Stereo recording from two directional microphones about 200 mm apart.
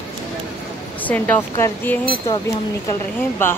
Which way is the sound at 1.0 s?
10° left (ahead or behind).